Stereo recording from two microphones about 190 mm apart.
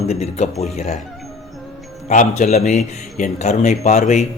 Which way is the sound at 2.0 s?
40° left (ahead or behind).